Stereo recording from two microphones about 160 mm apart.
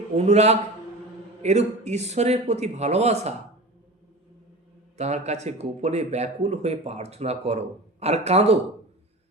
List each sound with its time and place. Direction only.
0.2 s a man's voice: 45° right (ahead or behind)
4.9 s a man's voice: 45° right (ahead or behind)